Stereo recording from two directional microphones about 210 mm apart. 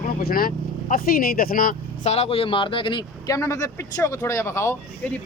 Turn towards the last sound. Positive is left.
turn(degrees=10)  # may be behind; listen again after turning